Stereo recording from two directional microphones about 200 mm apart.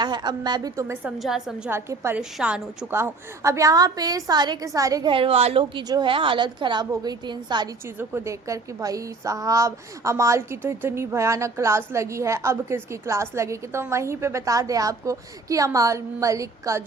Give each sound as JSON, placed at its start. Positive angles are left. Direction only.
{"t": 0.0, "sound": "a woman's voice", "side_deg": -20}
{"t": 1.2, "sound": "a woman's voice", "side_deg": 0}